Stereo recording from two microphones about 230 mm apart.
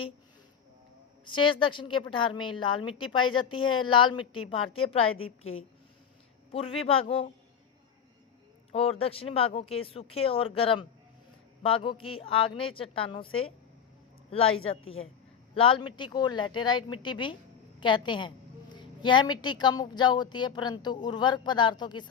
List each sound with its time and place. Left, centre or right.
1.2 s a woman's voice: left
6.5 s a woman's voice: left
8.7 s a woman's voice: left